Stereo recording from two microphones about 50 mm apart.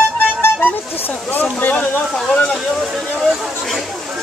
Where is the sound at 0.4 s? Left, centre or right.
Left.